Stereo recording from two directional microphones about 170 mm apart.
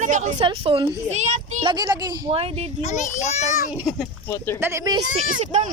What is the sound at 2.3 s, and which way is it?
Speech, 35° right (ahead or behind).